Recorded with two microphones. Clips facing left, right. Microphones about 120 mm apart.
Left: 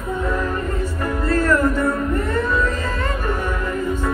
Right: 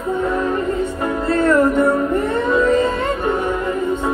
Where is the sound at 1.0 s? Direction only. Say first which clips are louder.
Right 2 dB; 25° right (ahead or behind).